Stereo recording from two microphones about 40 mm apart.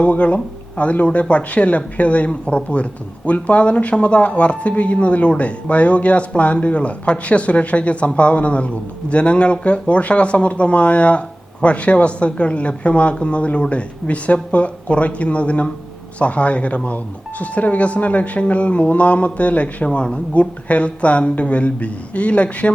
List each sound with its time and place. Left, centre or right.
0.0 s speech: left